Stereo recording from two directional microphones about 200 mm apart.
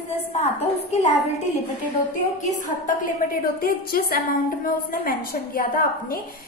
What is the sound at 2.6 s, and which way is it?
A woman's voice, 40° left (ahead or behind).